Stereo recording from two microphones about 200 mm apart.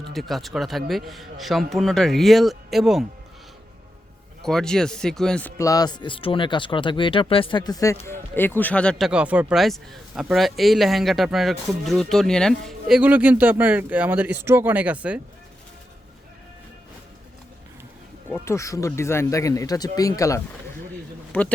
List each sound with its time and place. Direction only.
0.1 s speech: centre (ahead or behind)
4.4 s speech: 5° left (ahead or behind)
18.3 s speech: 10° left (ahead or behind)